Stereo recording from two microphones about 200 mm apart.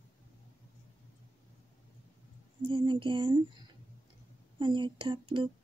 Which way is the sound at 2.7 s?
25° right (ahead or behind).